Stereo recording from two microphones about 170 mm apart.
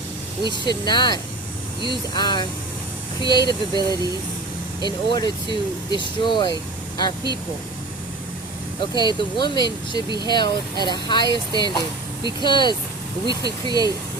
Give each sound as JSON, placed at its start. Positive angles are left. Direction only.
{"t": 0.4, "sound": "speech", "side_deg": 25}
{"t": 3.8, "sound": "speech", "side_deg": -25}
{"t": 4.8, "sound": "speech", "side_deg": 25}
{"t": 9.0, "sound": "speech", "side_deg": 25}
{"t": 13.4, "sound": "speech", "side_deg": -25}